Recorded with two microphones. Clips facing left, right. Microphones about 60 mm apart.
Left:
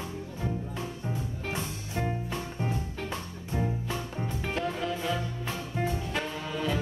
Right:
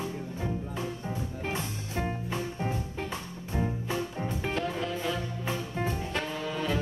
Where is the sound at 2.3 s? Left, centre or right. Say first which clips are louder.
Right 1 dB; centre.